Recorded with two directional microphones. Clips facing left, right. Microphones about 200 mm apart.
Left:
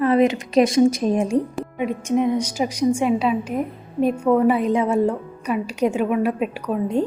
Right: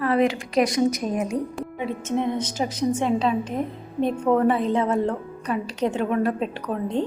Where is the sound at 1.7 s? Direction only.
15° left (ahead or behind).